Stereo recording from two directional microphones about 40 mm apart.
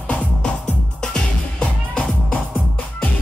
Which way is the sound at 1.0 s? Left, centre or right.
Centre.